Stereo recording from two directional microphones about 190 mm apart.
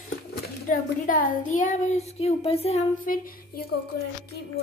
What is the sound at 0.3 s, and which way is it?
Speech, 45° left (ahead or behind).